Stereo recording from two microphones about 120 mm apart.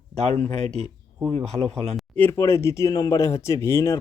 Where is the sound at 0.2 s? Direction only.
60° right (ahead or behind).